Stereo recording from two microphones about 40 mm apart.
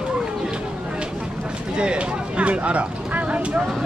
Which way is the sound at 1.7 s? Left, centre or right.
Right.